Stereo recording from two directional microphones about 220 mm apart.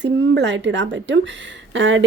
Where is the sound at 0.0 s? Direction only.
55° right (ahead or behind).